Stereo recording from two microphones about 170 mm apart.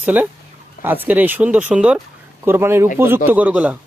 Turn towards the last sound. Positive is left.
turn(degrees=-10)  # may be behind; listen again after turning